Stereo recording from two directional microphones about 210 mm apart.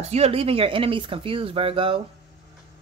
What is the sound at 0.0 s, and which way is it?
Speech, 30° right (ahead or behind).